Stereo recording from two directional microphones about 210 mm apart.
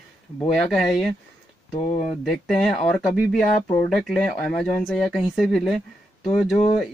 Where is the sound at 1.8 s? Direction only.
35° left (ahead or behind).